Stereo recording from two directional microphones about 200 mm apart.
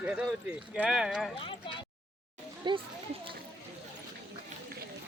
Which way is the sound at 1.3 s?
25° left (ahead or behind).